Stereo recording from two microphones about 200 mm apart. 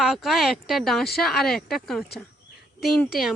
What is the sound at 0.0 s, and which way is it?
Speech, centre (ahead or behind).